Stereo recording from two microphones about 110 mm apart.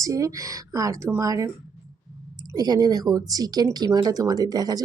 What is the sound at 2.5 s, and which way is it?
Speech, 35° right (ahead or behind).